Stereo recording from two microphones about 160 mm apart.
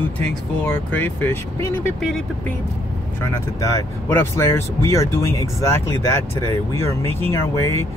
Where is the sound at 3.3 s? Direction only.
20° left (ahead or behind).